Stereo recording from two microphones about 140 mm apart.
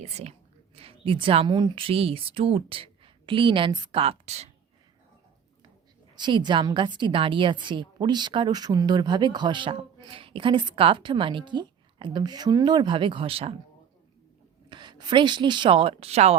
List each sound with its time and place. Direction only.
0.0 s a woman's voice: 50° right (ahead or behind)
6.1 s a woman's voice: 35° right (ahead or behind)
14.7 s a woman's voice: 35° right (ahead or behind); by 16.3 s 50° right (ahead or behind)